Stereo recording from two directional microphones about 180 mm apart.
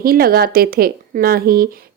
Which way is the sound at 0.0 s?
55° right (ahead or behind).